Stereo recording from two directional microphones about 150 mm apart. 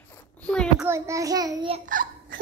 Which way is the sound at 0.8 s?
20° right (ahead or behind).